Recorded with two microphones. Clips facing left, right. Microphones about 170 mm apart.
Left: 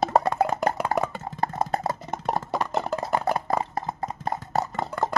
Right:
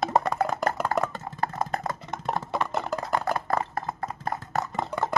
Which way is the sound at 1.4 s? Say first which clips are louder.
Left 3 dB; 30° left (ahead or behind).